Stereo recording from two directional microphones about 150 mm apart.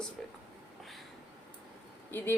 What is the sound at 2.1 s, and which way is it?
Speech, 15° left (ahead or behind).